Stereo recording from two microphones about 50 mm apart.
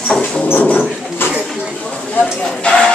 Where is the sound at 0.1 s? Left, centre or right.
Centre.